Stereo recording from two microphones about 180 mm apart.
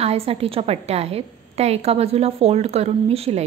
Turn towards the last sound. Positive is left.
turn(degrees=-35)  # may be behind; listen again after turning